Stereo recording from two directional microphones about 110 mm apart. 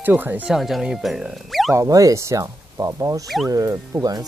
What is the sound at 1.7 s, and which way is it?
Speech, 30° right (ahead or behind).